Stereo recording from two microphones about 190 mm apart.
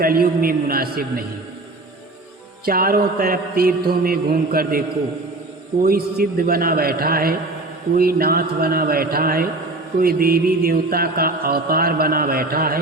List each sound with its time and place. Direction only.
0.0 s music: 50° right (ahead or behind)
2.6 s music: 50° right (ahead or behind)
5.8 s music: 50° right (ahead or behind)